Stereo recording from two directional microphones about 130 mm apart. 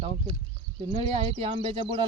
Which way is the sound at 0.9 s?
45° right (ahead or behind).